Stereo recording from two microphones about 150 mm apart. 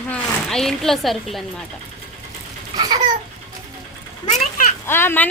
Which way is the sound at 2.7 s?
25° right (ahead or behind).